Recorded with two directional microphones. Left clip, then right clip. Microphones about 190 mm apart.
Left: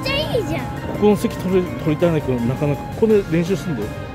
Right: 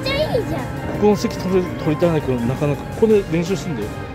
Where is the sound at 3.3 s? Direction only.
20° left (ahead or behind).